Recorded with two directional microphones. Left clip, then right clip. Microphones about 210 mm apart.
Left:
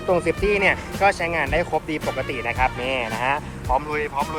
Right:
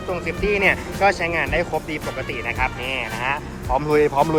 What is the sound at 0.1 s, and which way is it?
Speech, centre (ahead or behind).